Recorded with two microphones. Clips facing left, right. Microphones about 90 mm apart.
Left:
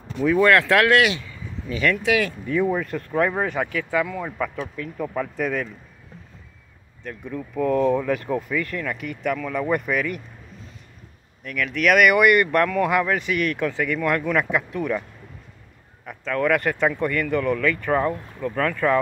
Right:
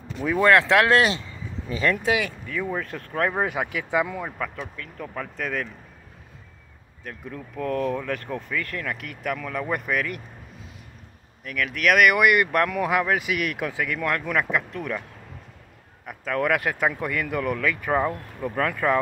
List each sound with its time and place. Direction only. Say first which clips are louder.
0.4 s speech: even; 20° right (ahead or behind)
2.4 s speech: left 8 dB; 20° left (ahead or behind)
2.7 s speech: left 5 dB; centre (ahead or behind)
3.9 s speech: right 1 dB; 20° right (ahead or behind)
4.4 s speech: left 4 dB; 5° left (ahead or behind)
7.1 s speech: left 5 dB; centre (ahead or behind)
11.4 s speech: left 2 dB; centre (ahead or behind)
16.1 s speech: left 2 dB; 5° right (ahead or behind)